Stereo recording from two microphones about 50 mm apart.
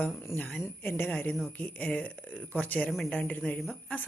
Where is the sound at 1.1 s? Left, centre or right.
Left.